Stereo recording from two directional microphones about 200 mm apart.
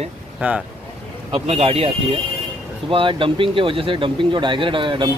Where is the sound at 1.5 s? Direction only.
30° right (ahead or behind).